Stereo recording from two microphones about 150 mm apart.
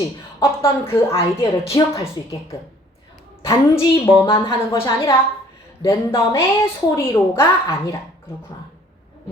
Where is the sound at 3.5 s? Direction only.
15° left (ahead or behind).